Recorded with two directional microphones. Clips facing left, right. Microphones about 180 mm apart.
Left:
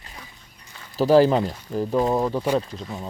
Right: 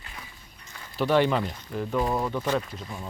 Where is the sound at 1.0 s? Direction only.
35° left (ahead or behind).